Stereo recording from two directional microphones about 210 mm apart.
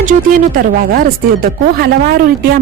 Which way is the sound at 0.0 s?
40° right (ahead or behind).